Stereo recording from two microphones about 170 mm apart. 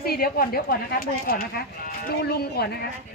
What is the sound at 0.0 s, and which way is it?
A woman's voice, 60° left (ahead or behind).